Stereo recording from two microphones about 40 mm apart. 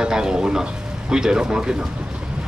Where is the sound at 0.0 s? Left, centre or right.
Centre.